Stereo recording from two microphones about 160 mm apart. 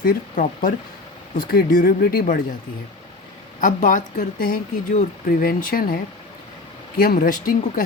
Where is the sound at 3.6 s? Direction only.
55° left (ahead or behind).